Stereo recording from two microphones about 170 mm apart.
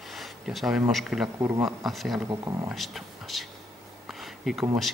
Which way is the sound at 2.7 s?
Centre (ahead or behind).